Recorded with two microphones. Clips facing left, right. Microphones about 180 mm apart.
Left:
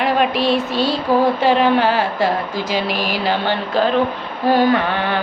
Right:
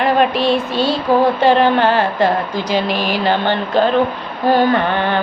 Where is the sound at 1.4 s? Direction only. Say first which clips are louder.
Right 2 dB; 5° left (ahead or behind).